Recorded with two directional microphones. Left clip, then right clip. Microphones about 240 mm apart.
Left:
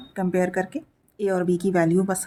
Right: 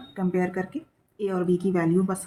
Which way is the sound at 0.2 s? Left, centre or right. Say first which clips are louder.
Left 4 dB; left.